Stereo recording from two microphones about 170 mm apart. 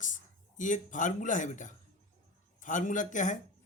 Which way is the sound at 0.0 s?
50° left (ahead or behind).